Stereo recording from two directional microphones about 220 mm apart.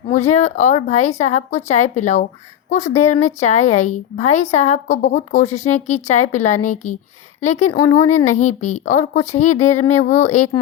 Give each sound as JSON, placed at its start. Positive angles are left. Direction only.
{"t": 0.1, "sound": "a woman's voice", "side_deg": 30}